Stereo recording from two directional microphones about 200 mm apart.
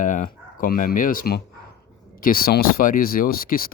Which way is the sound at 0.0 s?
40° left (ahead or behind).